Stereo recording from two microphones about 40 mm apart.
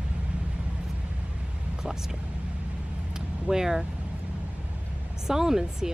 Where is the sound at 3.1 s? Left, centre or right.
Centre.